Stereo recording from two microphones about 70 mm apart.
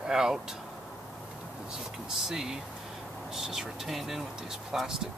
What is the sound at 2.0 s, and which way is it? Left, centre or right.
Speech, centre.